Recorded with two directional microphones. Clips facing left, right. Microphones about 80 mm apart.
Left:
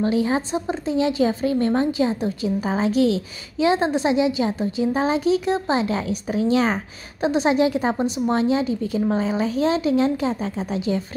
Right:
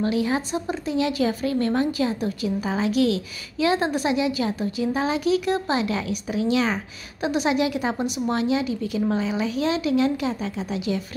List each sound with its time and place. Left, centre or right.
0.0 s a woman's voice: left